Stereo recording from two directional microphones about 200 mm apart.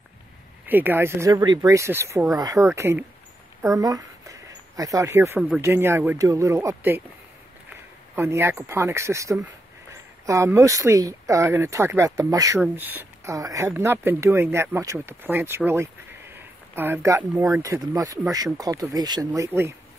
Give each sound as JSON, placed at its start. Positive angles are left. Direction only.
{"t": 0.7, "sound": "speech", "side_deg": -10}
{"t": 8.2, "sound": "speech", "side_deg": -15}